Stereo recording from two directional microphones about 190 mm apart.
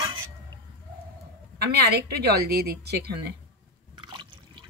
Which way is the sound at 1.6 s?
60° right (ahead or behind).